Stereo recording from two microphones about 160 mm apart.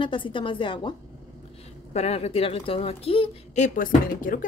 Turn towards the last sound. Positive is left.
turn(degrees=60)  # may be behind; listen again after turning